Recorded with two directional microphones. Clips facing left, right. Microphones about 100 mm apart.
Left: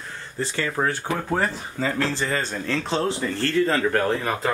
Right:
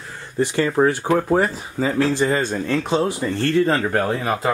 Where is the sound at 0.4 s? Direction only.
15° right (ahead or behind).